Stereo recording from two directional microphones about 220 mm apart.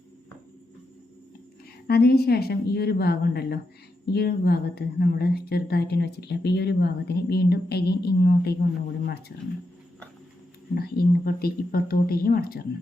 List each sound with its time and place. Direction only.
1.9 s a woman's voice: 45° left (ahead or behind)
10.8 s a woman's voice: 45° left (ahead or behind)